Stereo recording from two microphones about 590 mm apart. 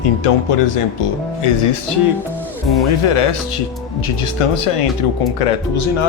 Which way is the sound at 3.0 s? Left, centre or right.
Left.